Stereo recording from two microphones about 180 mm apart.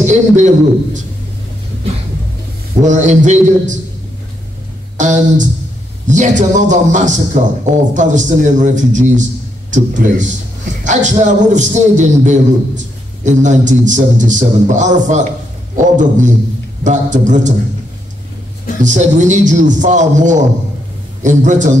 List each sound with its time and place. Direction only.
0.0 s a man's voice: 40° right (ahead or behind)
2.8 s a man's voice: 45° right (ahead or behind)
4.9 s a man's voice: 45° right (ahead or behind)
18.8 s a man's voice: 45° right (ahead or behind)